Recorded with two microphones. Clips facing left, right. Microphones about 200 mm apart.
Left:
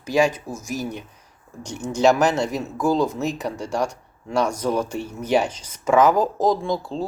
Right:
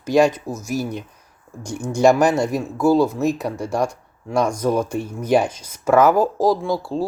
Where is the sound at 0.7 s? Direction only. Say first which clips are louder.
Right 4 dB; 10° right (ahead or behind).